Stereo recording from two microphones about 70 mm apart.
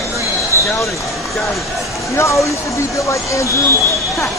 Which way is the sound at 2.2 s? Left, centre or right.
Left.